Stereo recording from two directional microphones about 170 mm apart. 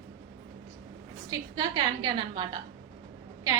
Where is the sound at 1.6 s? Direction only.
25° right (ahead or behind).